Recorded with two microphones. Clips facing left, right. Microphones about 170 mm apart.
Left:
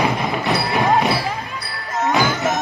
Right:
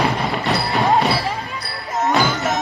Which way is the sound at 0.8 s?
Centre (ahead or behind).